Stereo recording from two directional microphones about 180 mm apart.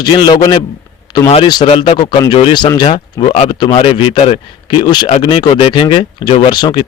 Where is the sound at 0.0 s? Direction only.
25° left (ahead or behind).